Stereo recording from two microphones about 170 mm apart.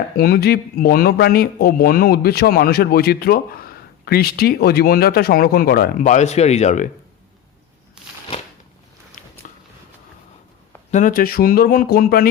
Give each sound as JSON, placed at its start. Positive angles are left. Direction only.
{"t": 0.2, "sound": "a man's voice", "side_deg": 65}
{"t": 9.2, "sound": "a sound", "side_deg": 50}
{"t": 10.9, "sound": "a man's voice", "side_deg": 55}